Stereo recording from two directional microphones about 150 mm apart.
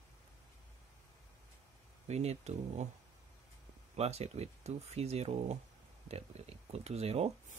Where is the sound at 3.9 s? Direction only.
45° right (ahead or behind).